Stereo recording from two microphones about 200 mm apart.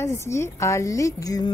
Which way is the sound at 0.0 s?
15° left (ahead or behind).